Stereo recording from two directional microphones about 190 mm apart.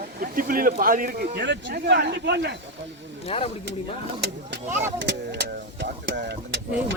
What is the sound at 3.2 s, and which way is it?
Speech, 30° left (ahead or behind).